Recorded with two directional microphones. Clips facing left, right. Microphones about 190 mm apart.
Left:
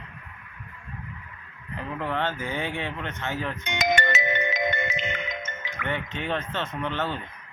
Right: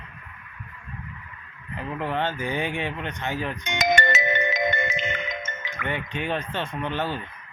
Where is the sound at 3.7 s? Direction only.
45° right (ahead or behind).